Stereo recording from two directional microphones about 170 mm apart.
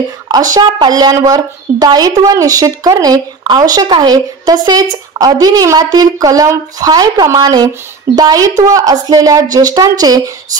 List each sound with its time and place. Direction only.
0.3 s a woman's voice: 25° right (ahead or behind)